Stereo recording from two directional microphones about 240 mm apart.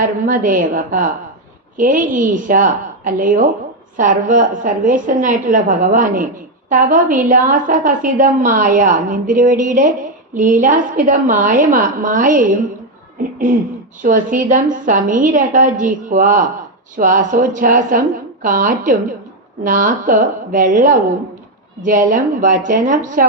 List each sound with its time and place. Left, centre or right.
0.3 s a woman's voice: right
14.0 s a woman's voice: right